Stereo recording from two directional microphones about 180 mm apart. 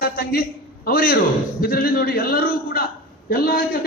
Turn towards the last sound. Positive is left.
turn(degrees=55)  # may be behind; listen again after turning